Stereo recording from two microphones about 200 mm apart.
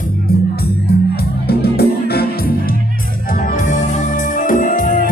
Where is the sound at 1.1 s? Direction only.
55° left (ahead or behind).